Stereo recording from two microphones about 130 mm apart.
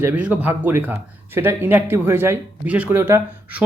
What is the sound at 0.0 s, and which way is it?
Speech, 10° right (ahead or behind).